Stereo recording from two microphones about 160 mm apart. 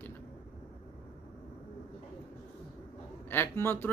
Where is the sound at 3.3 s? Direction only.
15° left (ahead or behind).